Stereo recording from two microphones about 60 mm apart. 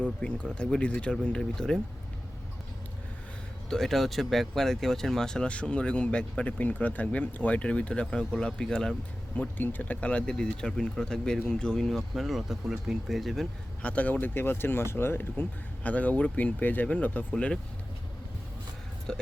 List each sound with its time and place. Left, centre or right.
0.0 s speech: centre
1.1 s speech: centre
3.7 s speech: centre
9.3 s speech: left; by 11.9 s centre
11.9 s speech: centre
13.8 s speech: left
15.8 s speech: left
17.3 s speech: centre
19.1 s speech: centre